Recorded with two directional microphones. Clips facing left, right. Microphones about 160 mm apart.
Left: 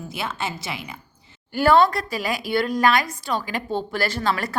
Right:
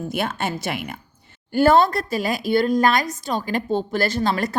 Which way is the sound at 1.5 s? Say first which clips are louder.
Right 1 dB; 45° right (ahead or behind).